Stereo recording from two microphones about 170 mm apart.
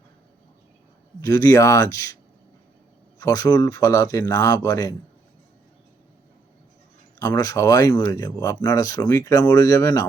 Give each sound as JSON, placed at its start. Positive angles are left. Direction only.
{"t": 1.2, "sound": "speech", "side_deg": 20}
{"t": 3.2, "sound": "speech", "side_deg": 20}
{"t": 7.2, "sound": "speech", "side_deg": 20}